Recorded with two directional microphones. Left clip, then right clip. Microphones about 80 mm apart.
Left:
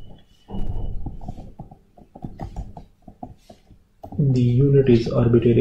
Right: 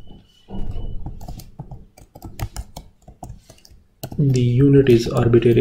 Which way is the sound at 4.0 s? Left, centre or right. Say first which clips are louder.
Right 2 dB; right.